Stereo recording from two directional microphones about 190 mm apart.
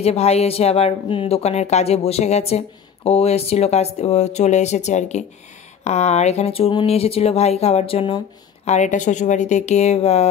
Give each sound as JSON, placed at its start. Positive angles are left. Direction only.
{"t": 0.0, "sound": "speech", "side_deg": 35}